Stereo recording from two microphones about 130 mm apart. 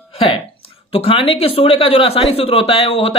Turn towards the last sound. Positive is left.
turn(degrees=50)  # may be behind; listen again after turning